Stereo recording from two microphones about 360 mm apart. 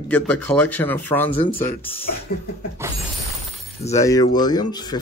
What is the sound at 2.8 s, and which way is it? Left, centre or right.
Shatter, centre.